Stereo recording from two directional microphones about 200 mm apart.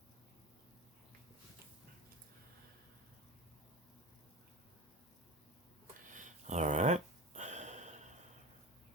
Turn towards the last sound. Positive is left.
turn(degrees=-35)  # may be behind; listen again after turning